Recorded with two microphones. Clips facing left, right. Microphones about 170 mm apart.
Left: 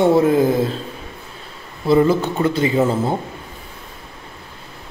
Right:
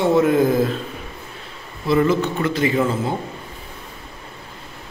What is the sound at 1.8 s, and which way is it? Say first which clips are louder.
Speech: left 3 dB; 30° left (ahead or behind).